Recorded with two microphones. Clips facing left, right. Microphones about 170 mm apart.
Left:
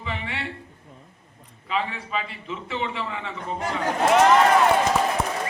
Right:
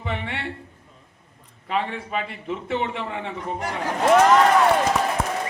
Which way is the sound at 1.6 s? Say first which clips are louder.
Right 2 dB; 50° right (ahead or behind).